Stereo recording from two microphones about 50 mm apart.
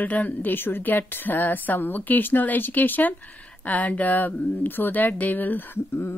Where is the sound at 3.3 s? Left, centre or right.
Left.